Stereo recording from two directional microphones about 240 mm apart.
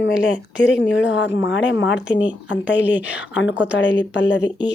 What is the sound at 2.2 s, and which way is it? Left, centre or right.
Speech, centre.